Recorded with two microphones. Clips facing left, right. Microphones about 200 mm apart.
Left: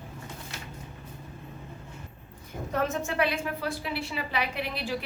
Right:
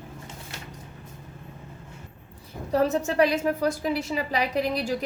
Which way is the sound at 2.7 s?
35° right (ahead or behind).